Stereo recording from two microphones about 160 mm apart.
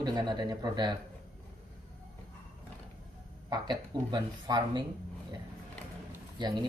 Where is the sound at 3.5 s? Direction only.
25° right (ahead or behind).